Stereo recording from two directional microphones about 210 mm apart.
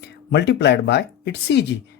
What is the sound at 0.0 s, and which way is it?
Speech, 55° left (ahead or behind).